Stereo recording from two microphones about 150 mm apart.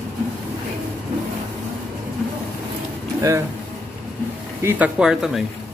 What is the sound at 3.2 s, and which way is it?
Speech, 20° right (ahead or behind).